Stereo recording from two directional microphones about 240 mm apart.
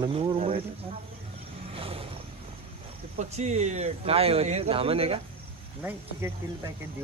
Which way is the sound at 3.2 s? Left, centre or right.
Right.